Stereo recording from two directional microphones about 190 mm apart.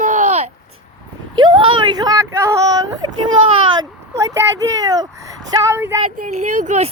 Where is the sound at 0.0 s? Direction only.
40° right (ahead or behind).